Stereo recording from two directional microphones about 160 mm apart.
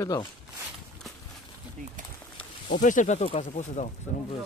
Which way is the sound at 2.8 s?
50° left (ahead or behind).